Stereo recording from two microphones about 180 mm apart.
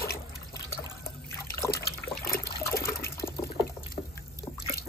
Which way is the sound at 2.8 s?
15° left (ahead or behind).